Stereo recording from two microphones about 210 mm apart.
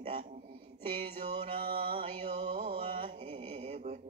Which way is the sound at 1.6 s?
45° right (ahead or behind).